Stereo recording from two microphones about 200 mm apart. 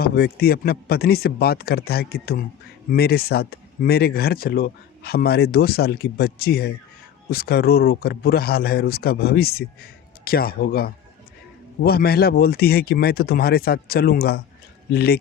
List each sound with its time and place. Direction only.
0.0 s speech: 50° left (ahead or behind)